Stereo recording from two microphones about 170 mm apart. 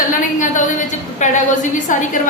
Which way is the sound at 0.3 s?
50° left (ahead or behind).